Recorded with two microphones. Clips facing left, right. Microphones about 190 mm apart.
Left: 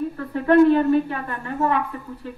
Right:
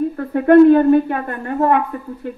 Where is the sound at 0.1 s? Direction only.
45° right (ahead or behind).